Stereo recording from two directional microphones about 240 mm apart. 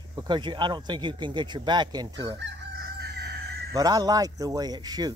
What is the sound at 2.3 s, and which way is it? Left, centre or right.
Crowing, right.